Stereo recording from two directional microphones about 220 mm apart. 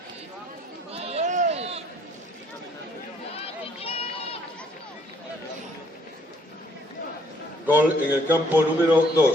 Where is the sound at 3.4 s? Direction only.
25° left (ahead or behind).